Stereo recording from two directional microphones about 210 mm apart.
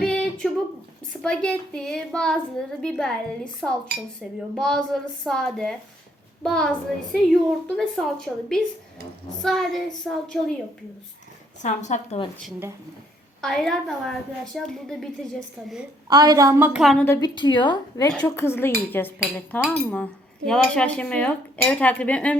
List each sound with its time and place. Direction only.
0.0 s a sound: 5° left (ahead or behind)
1.1 s speech: 5° left (ahead or behind)
11.6 s a woman's voice: 35° left (ahead or behind)
12.4 s speech: 5° right (ahead or behind)
16.0 s a woman's voice: 20° right (ahead or behind); by 17.1 s centre (ahead or behind)
17.1 s a woman's voice: 20° left (ahead or behind)
18.1 s speech: 10° left (ahead or behind)